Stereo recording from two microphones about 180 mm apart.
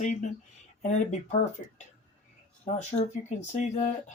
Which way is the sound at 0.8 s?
40° left (ahead or behind).